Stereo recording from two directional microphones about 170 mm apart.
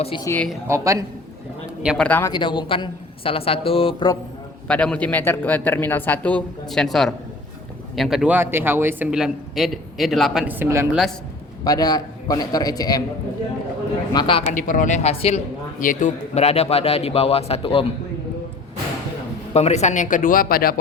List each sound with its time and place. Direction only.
0.0 s a man's voice: 30° left (ahead or behind)
0.7 s a man's voice: 20° right (ahead or behind)
1.8 s a man's voice: 5° right (ahead or behind)
2.0 s speech: 10° left (ahead or behind)
2.3 s a man's voice: 30° left (ahead or behind)
4.7 s a man's voice: 5° left (ahead or behind)
10.4 s speech: 10° right (ahead or behind)
11.6 s a man's voice: 20° left (ahead or behind)
14.1 s a man's voice: 25° left (ahead or behind)
14.5 s speech: 50° left (ahead or behind)
15.8 s a man's voice: 50° left (ahead or behind); by 17.8 s 30° left (ahead or behind)
19.5 s speech: 40° left (ahead or behind); by 20.7 s 60° left (ahead or behind)